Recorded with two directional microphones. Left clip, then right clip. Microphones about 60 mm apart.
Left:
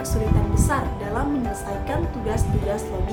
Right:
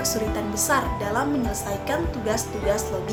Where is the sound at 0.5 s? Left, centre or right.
Left.